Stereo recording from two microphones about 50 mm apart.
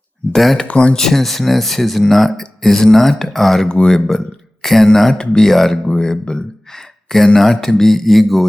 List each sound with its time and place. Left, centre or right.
0.3 s speech: centre
0.6 s speech: left
0.9 s speech: centre
5.5 s speech: centre